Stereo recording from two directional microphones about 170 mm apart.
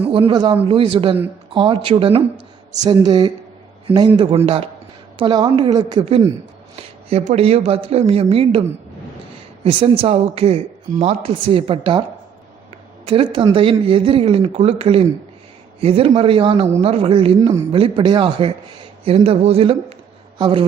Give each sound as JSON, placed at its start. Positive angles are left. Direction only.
{"t": 0.0, "sound": "a woman's voice", "side_deg": -30}
{"t": 9.6, "sound": "speech", "side_deg": -30}
{"t": 13.1, "sound": "speech", "side_deg": -30}